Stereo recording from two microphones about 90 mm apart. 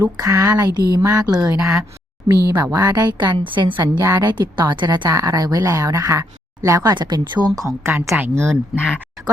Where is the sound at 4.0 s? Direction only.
40° right (ahead or behind); by 5.1 s 60° right (ahead or behind).